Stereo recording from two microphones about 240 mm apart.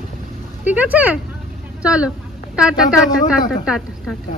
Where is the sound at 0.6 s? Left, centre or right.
Centre.